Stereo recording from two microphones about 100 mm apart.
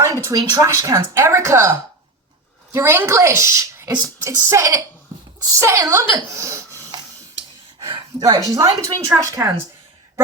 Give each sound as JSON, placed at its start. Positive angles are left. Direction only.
{"t": 0.0, "sound": "speech", "side_deg": -30}
{"t": 2.7, "sound": "a woman's voice", "side_deg": -25}
{"t": 7.9, "sound": "a sound", "side_deg": -40}
{"t": 8.5, "sound": "speech", "side_deg": -35}